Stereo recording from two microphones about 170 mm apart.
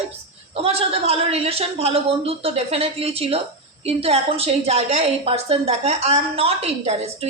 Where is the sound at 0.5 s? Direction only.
35° right (ahead or behind).